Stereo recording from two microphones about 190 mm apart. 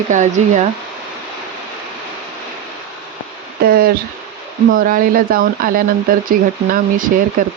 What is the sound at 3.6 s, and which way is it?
Speech, 50° right (ahead or behind).